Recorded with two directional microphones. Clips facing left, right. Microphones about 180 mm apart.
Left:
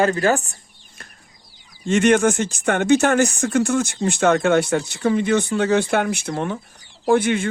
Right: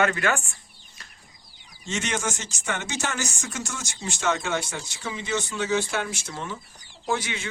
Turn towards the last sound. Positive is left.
turn(degrees=55)  # may be behind; listen again after turning